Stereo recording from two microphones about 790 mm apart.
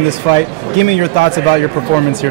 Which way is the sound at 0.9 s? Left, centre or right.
Left.